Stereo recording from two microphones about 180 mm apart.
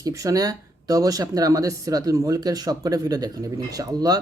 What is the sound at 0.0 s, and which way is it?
Speech, 20° right (ahead or behind).